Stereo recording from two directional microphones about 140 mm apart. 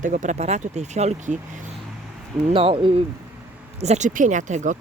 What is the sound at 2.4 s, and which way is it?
Speech, 40° right (ahead or behind).